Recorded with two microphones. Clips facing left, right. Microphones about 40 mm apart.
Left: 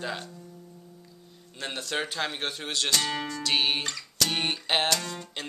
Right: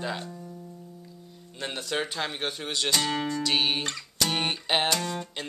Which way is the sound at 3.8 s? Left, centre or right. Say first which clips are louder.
Even; centre.